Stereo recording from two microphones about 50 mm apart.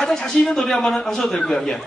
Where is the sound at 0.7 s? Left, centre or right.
Centre.